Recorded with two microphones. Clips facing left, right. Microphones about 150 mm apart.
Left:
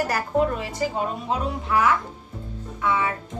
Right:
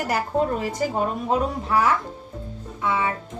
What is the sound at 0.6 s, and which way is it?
A woman's voice, 45° right (ahead or behind).